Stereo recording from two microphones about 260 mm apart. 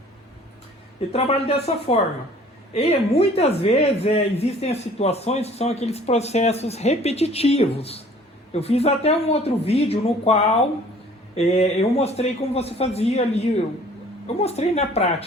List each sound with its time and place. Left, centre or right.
1.1 s speech: left
14.3 s speech: left